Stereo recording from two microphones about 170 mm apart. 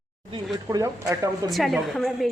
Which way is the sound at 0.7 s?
20° right (ahead or behind).